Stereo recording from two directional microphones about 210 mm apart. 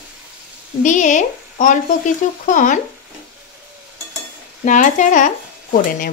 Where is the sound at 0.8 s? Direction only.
35° left (ahead or behind).